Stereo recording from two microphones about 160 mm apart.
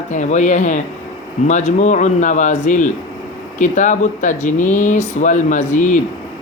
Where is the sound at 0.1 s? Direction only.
50° left (ahead or behind).